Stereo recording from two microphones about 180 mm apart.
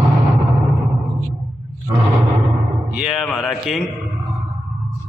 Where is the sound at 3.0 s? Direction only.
Centre (ahead or behind).